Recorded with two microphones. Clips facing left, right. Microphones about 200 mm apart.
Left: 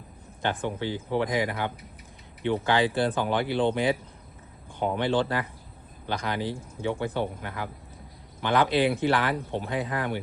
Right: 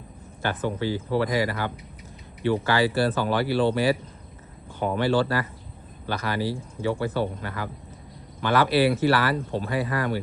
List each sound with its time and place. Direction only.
0.4 s speech: 15° left (ahead or behind)